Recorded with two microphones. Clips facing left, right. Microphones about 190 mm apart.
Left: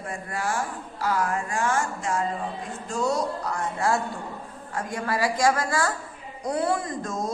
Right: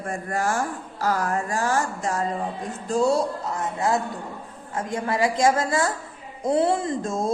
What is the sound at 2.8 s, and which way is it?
Speech, 30° right (ahead or behind).